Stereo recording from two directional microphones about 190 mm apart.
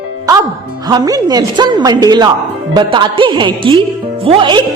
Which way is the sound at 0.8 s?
20° right (ahead or behind).